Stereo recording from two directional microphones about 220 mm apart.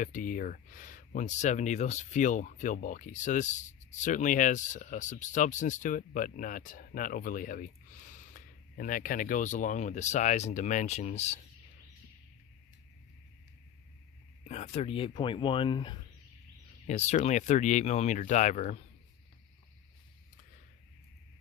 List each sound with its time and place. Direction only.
0.0 s speech: 35° left (ahead or behind)
14.4 s speech: 30° left (ahead or behind)